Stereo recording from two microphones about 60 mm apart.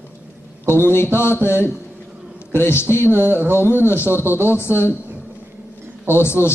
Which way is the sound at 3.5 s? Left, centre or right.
Left.